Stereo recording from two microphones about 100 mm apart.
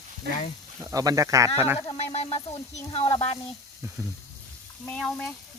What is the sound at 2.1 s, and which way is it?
Speech, 90° left.